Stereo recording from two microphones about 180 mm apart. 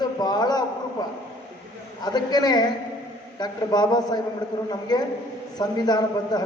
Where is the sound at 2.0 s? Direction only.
25° left (ahead or behind).